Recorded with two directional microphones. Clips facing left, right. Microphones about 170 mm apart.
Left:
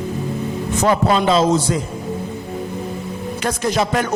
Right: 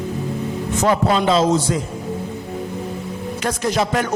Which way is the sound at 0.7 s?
35° left (ahead or behind).